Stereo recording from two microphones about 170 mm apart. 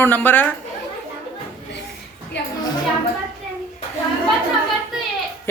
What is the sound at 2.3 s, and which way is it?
Speech, 90° left.